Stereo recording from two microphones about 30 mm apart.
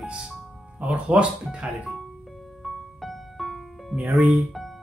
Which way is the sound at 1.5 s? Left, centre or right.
Right.